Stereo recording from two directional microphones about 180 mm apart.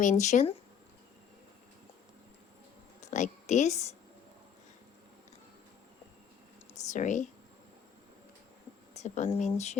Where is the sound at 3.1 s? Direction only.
40° left (ahead or behind).